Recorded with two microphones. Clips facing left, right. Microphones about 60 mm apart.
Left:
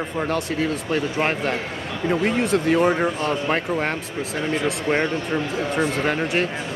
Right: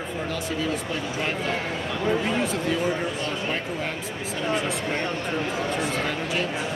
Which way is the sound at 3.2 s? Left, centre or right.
Left.